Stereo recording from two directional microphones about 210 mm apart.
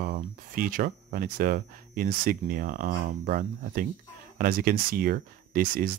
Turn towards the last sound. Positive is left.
turn(degrees=-40)  # may be behind; listen again after turning